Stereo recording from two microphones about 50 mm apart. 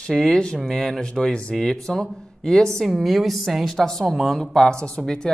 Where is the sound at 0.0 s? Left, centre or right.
Centre.